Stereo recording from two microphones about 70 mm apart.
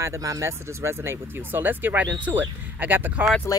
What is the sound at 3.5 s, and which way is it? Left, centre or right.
Music, left.